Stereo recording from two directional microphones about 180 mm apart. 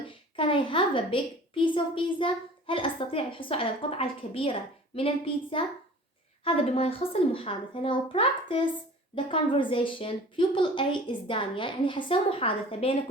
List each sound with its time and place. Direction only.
0.3 s a woman's voice: 30° left (ahead or behind)